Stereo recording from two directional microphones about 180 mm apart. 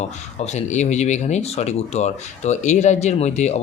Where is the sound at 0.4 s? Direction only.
40° left (ahead or behind).